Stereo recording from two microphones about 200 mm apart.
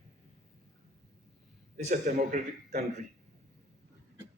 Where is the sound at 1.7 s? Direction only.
35° right (ahead or behind).